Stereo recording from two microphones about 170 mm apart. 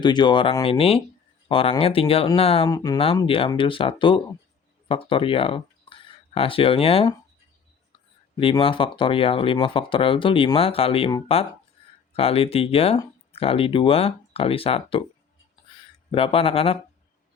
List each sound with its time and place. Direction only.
0.0 s speech: 25° left (ahead or behind)
2.6 s speech: 20° left (ahead or behind)
3.2 s speech: 30° left (ahead or behind)
8.4 s speech: 30° left (ahead or behind)
15.7 s a sound: 30° left (ahead or behind)